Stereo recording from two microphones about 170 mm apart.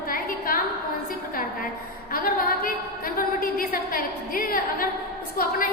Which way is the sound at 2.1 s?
60° left (ahead or behind).